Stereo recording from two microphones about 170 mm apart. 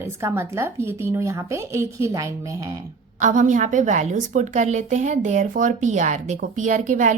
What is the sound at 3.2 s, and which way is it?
A woman's voice, 50° right (ahead or behind).